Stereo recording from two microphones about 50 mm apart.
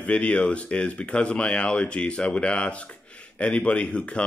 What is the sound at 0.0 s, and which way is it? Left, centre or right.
Speech, left.